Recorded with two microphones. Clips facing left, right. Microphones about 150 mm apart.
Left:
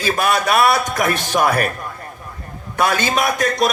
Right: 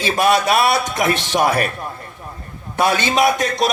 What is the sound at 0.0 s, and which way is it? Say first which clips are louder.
A man's voice: right 2 dB; 50° left (ahead or behind).